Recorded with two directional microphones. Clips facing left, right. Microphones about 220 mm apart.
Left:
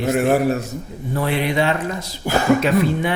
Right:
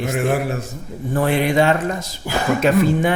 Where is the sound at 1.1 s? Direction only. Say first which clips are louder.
Right 3 dB; 50° right (ahead or behind).